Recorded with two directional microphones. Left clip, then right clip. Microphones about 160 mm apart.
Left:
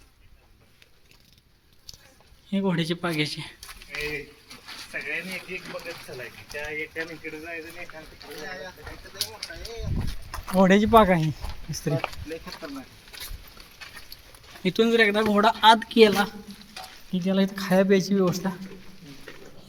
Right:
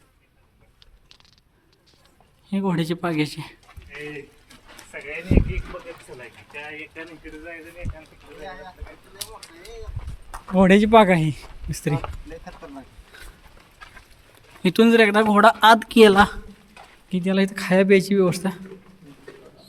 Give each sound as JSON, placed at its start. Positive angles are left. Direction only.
{"t": 2.5, "sound": "speech", "side_deg": -30}
{"t": 3.9, "sound": "a sound", "side_deg": 75}
{"t": 7.2, "sound": "speech", "side_deg": -10}
{"t": 10.5, "sound": "speech", "side_deg": -60}
{"t": 14.6, "sound": "speech", "side_deg": -50}